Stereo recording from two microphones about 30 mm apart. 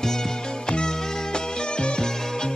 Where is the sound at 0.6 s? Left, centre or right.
Left.